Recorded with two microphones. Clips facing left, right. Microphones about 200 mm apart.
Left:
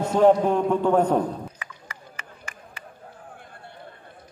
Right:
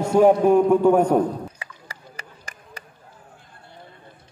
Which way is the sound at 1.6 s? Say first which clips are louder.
Right 1 dB; 35° right (ahead or behind).